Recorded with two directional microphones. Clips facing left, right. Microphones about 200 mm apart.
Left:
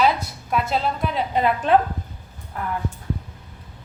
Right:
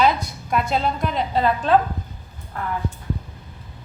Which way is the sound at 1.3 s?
15° left (ahead or behind).